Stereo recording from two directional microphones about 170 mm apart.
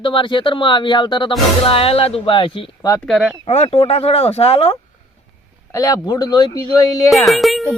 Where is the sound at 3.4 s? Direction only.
35° left (ahead or behind).